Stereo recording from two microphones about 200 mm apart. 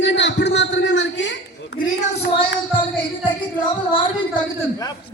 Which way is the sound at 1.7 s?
50° left (ahead or behind).